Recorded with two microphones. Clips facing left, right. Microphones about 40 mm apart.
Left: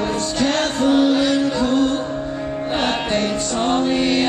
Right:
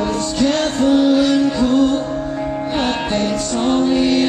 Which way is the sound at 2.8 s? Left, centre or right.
Centre.